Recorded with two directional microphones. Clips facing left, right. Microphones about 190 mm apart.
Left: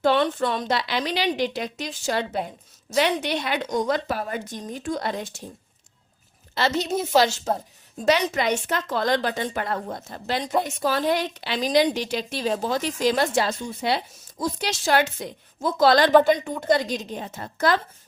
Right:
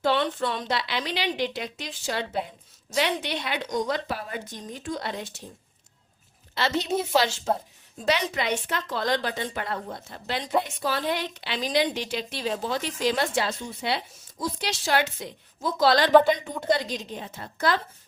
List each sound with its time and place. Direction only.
0.0 s a woman's voice: 50° left (ahead or behind)
6.5 s a woman's voice: 40° left (ahead or behind)